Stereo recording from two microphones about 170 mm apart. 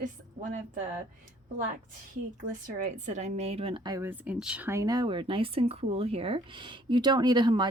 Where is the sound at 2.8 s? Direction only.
45° right (ahead or behind).